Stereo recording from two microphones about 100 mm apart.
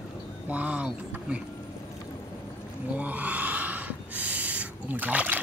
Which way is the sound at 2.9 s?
15° right (ahead or behind).